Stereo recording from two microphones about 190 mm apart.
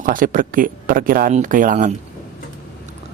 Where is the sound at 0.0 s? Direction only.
45° right (ahead or behind).